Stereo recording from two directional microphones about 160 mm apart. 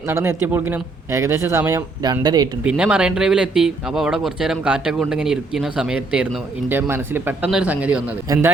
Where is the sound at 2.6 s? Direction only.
5° right (ahead or behind).